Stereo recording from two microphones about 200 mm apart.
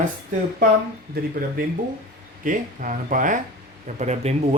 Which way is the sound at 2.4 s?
40° right (ahead or behind).